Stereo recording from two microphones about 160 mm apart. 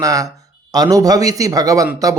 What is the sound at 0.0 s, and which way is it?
A man's voice, 20° right (ahead or behind).